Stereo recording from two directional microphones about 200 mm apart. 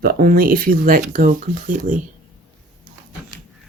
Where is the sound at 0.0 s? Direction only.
50° right (ahead or behind).